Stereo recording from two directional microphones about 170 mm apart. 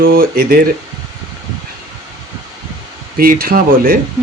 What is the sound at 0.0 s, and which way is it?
Speech, 60° right (ahead or behind).